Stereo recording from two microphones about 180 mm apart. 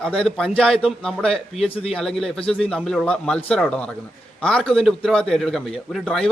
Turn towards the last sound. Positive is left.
turn(degrees=0)  # may be behind; listen again after turning